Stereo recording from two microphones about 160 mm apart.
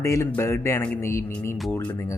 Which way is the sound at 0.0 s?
20° left (ahead or behind).